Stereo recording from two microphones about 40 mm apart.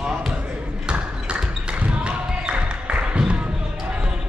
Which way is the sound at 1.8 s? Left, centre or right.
Right.